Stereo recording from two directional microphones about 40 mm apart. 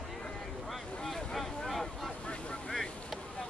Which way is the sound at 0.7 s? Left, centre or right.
Centre.